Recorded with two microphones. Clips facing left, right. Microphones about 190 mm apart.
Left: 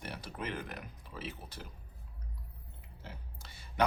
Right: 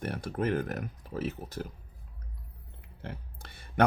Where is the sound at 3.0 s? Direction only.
55° right (ahead or behind).